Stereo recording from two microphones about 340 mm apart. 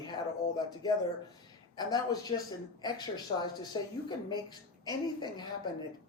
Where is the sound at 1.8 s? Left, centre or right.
Centre.